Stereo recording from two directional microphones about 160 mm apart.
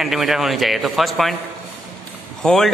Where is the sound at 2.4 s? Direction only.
Centre (ahead or behind).